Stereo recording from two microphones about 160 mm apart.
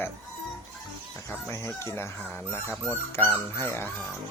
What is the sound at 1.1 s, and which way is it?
Speech, 15° left (ahead or behind).